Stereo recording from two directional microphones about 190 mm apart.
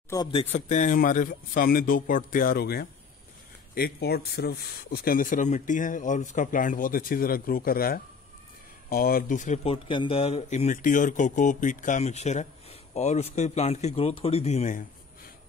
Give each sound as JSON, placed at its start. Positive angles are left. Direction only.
{"t": 0.1, "sound": "speech", "side_deg": 25}